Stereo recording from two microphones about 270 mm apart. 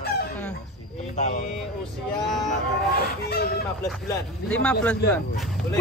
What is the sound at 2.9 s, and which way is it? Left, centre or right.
Music, left.